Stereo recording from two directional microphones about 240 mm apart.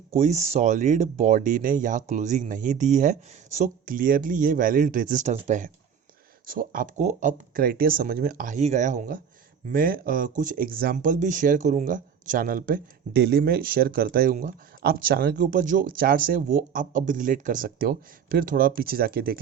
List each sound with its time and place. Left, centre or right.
0.1 s speech: right